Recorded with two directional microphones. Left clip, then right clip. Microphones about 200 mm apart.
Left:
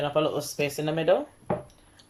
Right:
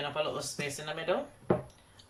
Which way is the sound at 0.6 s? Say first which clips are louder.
Left 9 dB; 45° left (ahead or behind).